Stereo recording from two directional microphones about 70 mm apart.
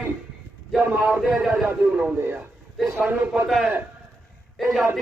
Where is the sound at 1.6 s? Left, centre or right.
Right.